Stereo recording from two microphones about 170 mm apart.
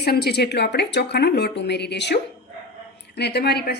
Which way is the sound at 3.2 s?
75° left (ahead or behind).